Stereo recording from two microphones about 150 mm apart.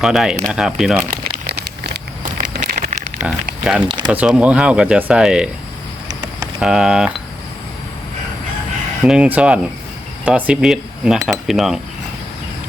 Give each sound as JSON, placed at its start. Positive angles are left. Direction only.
{"t": 0.0, "sound": "speech", "side_deg": -5}
{"t": 1.5, "sound": "crumpling", "side_deg": -90}
{"t": 2.4, "sound": "a sound", "side_deg": -70}
{"t": 3.2, "sound": "speech", "side_deg": -5}
{"t": 6.6, "sound": "speech", "side_deg": -5}
{"t": 9.0, "sound": "speech", "side_deg": -5}